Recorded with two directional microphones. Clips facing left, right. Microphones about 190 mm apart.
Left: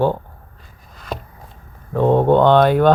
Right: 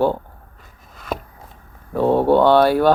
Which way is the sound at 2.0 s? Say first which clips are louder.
Left 1 dB; 20° left (ahead or behind).